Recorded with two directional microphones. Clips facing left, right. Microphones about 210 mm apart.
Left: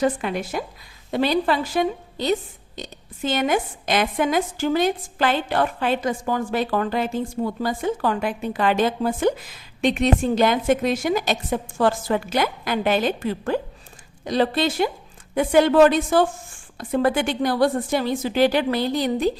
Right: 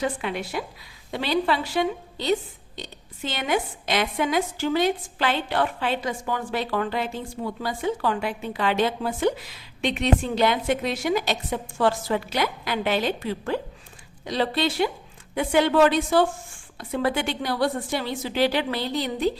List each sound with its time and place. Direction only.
0.0 s a woman's voice: 45° left (ahead or behind)